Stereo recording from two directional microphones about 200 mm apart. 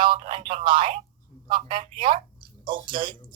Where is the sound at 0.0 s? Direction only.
25° right (ahead or behind).